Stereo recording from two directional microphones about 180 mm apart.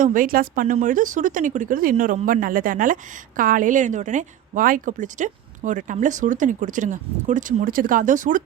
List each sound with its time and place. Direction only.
0.0 s speech: 50° right (ahead or behind)